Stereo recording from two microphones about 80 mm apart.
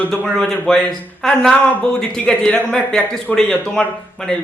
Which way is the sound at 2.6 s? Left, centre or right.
Left.